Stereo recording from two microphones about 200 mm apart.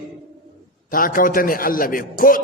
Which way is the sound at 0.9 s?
45° left (ahead or behind).